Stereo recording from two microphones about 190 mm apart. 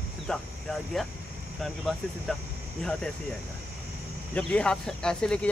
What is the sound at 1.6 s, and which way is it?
Speech, centre (ahead or behind).